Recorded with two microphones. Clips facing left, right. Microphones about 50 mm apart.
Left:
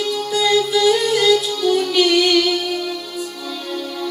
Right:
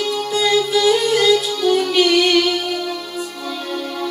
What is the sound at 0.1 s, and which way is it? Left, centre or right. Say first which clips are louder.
Music: left 1 dB; right.